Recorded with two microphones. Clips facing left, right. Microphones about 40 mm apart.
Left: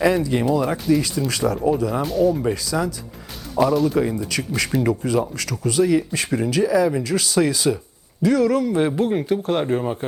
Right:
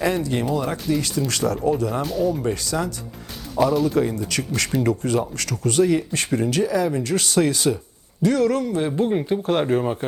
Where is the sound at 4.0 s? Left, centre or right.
Centre.